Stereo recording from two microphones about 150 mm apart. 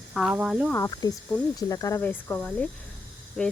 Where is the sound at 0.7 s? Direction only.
20° left (ahead or behind).